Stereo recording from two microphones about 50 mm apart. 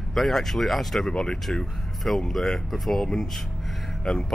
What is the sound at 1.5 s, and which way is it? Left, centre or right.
Speech, centre.